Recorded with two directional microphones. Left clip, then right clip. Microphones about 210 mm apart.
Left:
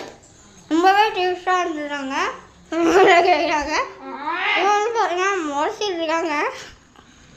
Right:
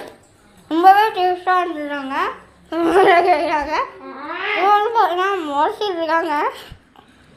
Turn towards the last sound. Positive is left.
turn(degrees=0)  # may be behind; listen again after turning